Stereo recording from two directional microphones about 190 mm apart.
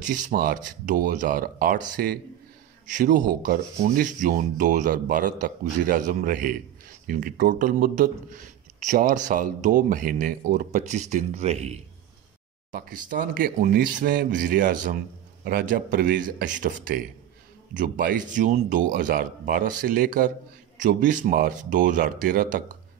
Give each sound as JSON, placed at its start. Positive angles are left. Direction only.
{"t": 0.0, "sound": "a man's voice", "side_deg": -45}
{"t": 12.7, "sound": "a man's voice", "side_deg": -50}